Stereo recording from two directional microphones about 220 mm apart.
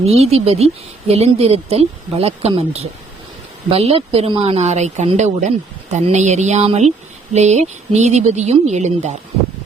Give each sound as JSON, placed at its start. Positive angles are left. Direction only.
{"t": 0.0, "sound": "speech", "side_deg": -30}